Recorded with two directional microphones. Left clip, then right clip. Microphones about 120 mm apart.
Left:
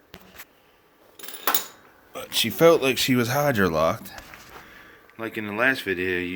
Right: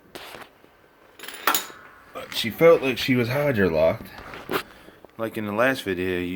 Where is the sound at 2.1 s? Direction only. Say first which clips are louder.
Left 3 dB; 70° left (ahead or behind).